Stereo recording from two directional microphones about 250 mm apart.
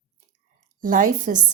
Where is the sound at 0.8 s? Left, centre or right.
Right.